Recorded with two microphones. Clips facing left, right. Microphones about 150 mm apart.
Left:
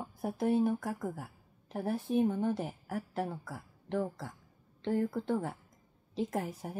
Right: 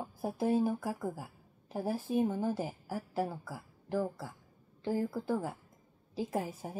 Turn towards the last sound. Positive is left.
turn(degrees=-5)  # may be behind; listen again after turning